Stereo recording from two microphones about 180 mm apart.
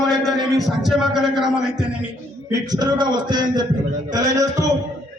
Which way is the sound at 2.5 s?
20° right (ahead or behind).